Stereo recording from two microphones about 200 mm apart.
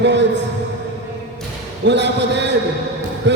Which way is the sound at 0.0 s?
60° right (ahead or behind).